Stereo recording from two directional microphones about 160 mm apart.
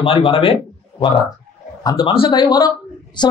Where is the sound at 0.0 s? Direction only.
35° left (ahead or behind).